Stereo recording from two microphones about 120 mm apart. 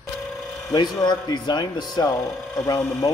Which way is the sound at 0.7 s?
35° left (ahead or behind).